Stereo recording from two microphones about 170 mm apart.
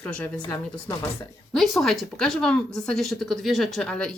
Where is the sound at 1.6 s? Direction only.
Centre (ahead or behind).